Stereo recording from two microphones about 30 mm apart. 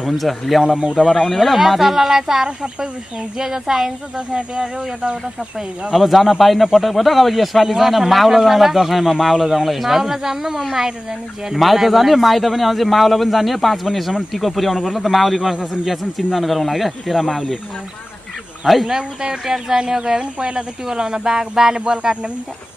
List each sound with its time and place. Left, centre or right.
0.0 s speech: centre
2.4 s speech: right
3.3 s speech: centre
4.3 s speech: right
5.9 s speech: centre
18.9 s speech: centre
20.0 s speech: right
21.8 s speech: right